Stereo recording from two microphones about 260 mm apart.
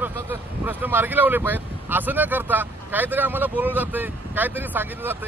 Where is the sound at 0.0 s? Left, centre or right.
Centre.